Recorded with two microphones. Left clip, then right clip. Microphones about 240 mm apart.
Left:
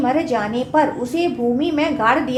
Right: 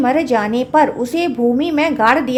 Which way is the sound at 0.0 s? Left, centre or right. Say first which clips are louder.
Right 4 dB; right.